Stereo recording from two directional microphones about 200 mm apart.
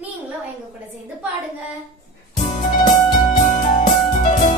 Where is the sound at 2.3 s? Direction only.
40° left (ahead or behind).